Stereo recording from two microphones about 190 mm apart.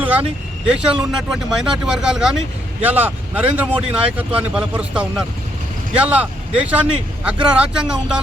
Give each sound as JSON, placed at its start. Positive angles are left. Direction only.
{"t": 0.7, "sound": "speech", "side_deg": -5}